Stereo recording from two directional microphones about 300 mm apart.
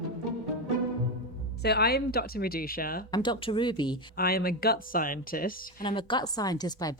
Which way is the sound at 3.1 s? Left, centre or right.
Centre.